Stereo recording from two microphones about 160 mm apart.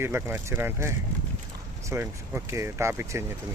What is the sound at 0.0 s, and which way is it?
Speech, 15° right (ahead or behind).